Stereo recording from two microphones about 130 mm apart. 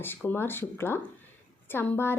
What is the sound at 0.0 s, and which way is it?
Speech, 15° left (ahead or behind).